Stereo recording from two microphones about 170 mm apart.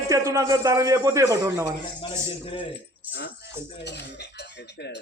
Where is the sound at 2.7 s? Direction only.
90° left.